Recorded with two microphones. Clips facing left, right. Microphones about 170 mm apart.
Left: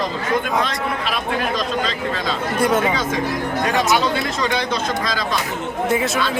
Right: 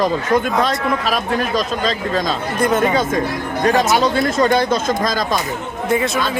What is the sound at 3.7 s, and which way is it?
Speech, 40° right (ahead or behind).